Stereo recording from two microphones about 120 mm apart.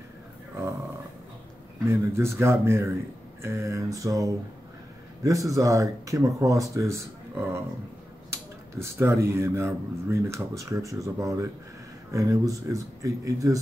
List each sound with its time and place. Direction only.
1.9 s speech: 20° right (ahead or behind)